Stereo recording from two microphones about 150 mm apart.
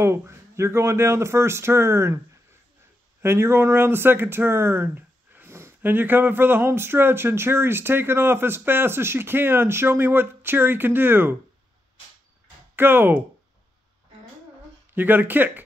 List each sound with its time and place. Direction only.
0.0 s speech: 15° right (ahead or behind)
3.2 s speech: 15° right (ahead or behind)
12.7 s speech: 15° right (ahead or behind)
15.0 s speech: 15° right (ahead or behind)